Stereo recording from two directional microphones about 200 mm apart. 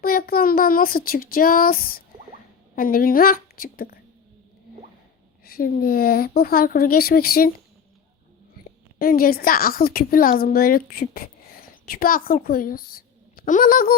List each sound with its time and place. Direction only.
0.0 s speech: 50° left (ahead or behind)
5.5 s speech: 45° left (ahead or behind)
9.0 s a woman's voice: 45° left (ahead or behind)